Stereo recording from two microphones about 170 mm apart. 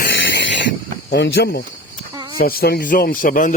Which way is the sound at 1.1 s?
80° left.